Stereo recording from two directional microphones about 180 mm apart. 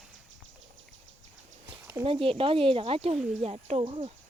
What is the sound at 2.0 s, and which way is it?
Speech, 30° right (ahead or behind).